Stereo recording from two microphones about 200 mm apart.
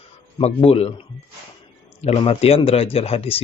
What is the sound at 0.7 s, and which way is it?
Speech, 30° left (ahead or behind).